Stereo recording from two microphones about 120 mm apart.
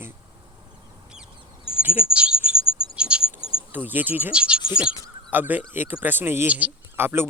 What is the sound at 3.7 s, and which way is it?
Speech, 15° right (ahead or behind).